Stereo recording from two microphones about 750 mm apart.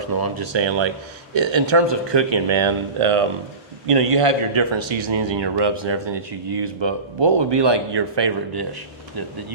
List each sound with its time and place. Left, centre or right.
0.0 s a man's voice: right